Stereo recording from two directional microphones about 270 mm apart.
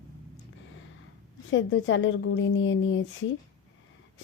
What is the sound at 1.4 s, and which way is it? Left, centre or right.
A woman's voice, left.